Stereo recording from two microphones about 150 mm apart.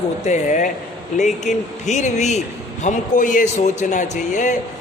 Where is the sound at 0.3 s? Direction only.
55° left (ahead or behind).